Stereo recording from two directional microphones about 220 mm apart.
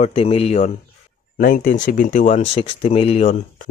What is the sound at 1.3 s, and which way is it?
Speech, 40° left (ahead or behind).